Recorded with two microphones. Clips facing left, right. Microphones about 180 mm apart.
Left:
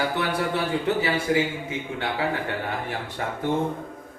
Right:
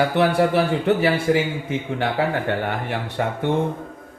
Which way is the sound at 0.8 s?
65° right (ahead or behind).